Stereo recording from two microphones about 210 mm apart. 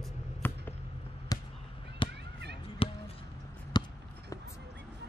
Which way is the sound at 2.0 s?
25° left (ahead or behind).